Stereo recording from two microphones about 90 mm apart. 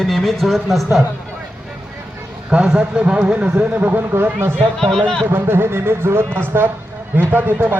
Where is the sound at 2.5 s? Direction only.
10° right (ahead or behind); by 4.5 s 25° right (ahead or behind).